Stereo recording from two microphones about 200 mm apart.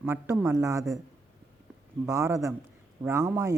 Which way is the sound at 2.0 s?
15° right (ahead or behind).